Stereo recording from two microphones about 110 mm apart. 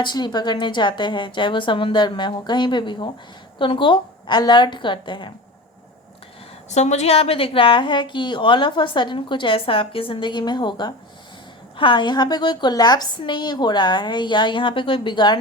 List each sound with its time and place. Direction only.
0.0 s a woman's voice: 40° left (ahead or behind)
6.7 s a woman's voice: 90° left; by 15.4 s 45° left (ahead or behind)